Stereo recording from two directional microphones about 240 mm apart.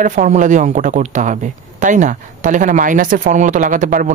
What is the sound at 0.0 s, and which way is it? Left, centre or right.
A man's voice, right.